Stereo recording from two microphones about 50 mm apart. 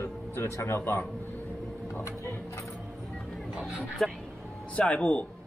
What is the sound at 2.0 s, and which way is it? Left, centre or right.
Speech, left.